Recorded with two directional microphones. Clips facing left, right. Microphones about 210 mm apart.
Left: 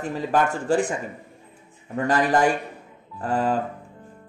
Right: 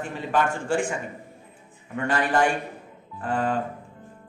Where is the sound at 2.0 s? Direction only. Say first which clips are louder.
Left 3 dB; 35° left (ahead or behind).